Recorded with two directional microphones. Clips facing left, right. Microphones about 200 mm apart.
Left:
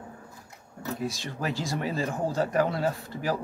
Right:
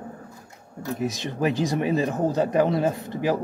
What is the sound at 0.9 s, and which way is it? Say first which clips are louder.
Speech: right 6 dB; 20° right (ahead or behind).